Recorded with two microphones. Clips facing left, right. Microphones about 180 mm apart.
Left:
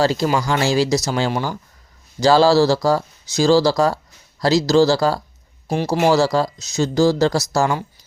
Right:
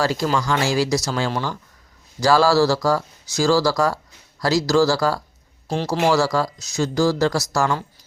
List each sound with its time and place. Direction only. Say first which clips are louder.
0.0 s speech: left 3 dB; 25° left (ahead or behind)
5.6 s speech: left 3 dB; 15° left (ahead or behind)
6.1 s speech: left 3 dB; 25° left (ahead or behind)